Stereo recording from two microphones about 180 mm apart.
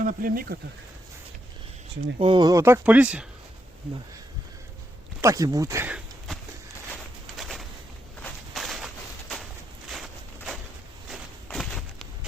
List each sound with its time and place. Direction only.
0.0 s speech: 50° right (ahead or behind)
2.1 s speech: 30° right (ahead or behind); by 3.2 s 5° right (ahead or behind)
5.2 s speech: 20° right (ahead or behind)
7.3 s a sound: centre (ahead or behind)
8.2 s walk: centre (ahead or behind)
11.5 s a sound: centre (ahead or behind)